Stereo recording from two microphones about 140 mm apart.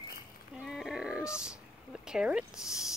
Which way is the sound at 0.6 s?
Centre (ahead or behind).